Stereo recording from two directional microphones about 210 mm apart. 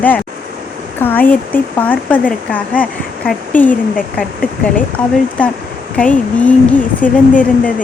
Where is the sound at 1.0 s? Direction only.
10° left (ahead or behind).